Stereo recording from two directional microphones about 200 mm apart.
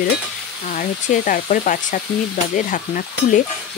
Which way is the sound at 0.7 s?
40° left (ahead or behind).